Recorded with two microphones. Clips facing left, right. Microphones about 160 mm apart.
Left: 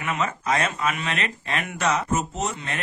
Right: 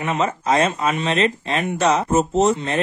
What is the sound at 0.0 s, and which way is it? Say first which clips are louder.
Speech: right 5 dB; 30° right (ahead or behind).